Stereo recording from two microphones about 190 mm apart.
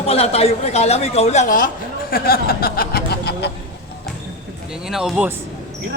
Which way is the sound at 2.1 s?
55° left (ahead or behind).